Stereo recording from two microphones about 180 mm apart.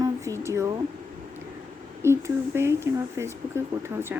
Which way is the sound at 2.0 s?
15° right (ahead or behind).